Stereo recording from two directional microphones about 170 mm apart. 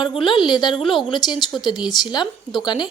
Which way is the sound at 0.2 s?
30° left (ahead or behind).